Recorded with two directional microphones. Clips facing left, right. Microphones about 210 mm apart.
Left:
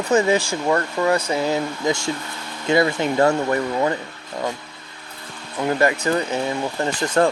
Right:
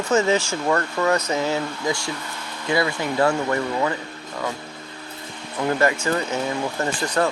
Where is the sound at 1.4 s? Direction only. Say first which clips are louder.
Left 2 dB; 15° left (ahead or behind).